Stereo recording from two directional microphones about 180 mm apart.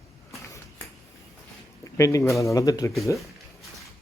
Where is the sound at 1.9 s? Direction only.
15° left (ahead or behind).